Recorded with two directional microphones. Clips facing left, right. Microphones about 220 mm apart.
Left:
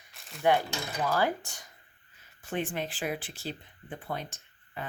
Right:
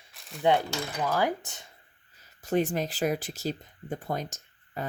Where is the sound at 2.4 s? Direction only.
40° right (ahead or behind).